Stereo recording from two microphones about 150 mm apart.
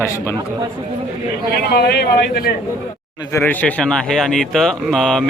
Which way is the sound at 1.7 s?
90° left.